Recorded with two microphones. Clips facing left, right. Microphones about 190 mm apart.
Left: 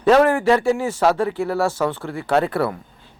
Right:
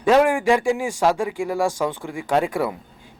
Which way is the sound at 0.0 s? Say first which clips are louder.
Left 2 dB; 10° right (ahead or behind).